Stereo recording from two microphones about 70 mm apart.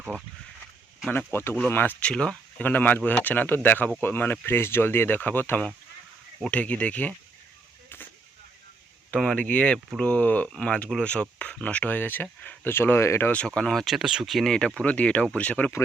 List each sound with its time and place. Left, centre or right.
1.3 s speech: left
2.0 s speech: centre
2.6 s speech: left
9.3 s speech: left
13.3 s speech: centre
14.4 s speech: centre